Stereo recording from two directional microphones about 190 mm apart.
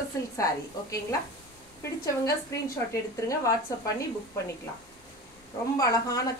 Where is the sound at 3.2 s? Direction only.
15° left (ahead or behind).